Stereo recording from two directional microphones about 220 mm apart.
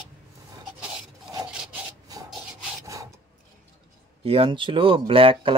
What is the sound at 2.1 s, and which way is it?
Rub, 15° right (ahead or behind).